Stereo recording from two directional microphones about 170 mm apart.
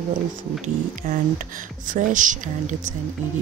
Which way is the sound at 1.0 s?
55° right (ahead or behind).